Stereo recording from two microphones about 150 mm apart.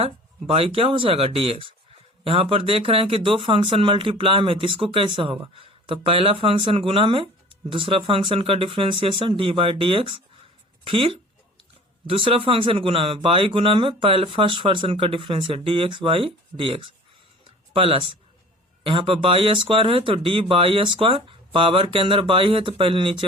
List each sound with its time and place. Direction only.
0.0 s speech: 40° right (ahead or behind)